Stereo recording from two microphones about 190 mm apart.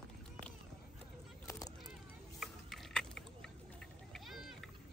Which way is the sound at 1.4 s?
20° left (ahead or behind).